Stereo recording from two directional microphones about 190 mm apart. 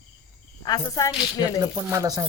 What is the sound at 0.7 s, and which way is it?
Speech, 20° left (ahead or behind).